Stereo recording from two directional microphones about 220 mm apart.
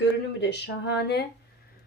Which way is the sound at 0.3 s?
50° left (ahead or behind).